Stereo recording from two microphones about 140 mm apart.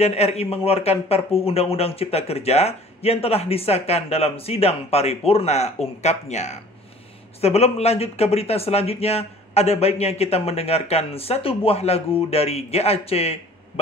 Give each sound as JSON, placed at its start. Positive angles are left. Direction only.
{"t": 0.0, "sound": "speech", "side_deg": 50}